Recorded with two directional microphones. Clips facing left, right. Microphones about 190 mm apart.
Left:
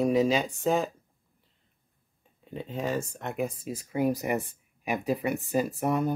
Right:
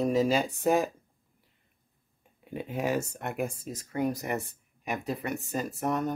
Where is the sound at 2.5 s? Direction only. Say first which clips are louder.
Right 1 dB; 10° right (ahead or behind).